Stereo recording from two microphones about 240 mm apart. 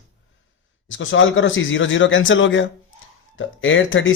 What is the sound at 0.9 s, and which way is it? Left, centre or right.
Speech, left.